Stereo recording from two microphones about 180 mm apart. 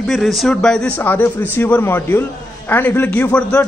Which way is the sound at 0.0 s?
Centre (ahead or behind).